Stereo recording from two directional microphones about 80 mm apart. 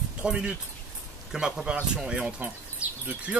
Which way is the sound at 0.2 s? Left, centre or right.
Centre.